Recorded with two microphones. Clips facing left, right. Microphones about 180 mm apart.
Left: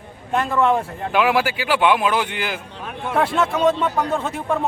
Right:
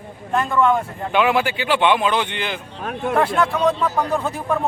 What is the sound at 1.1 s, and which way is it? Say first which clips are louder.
Speech: even; 5° left (ahead or behind).